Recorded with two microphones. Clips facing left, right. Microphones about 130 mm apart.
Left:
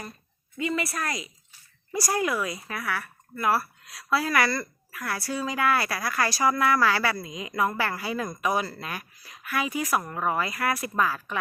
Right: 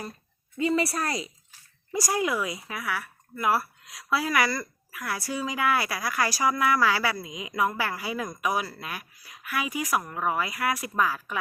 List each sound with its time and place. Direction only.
0.6 s speech: 35° right (ahead or behind)
1.9 s speech: 15° right (ahead or behind)